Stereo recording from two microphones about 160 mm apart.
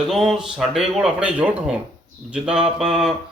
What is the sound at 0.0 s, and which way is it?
Speech, 5° right (ahead or behind).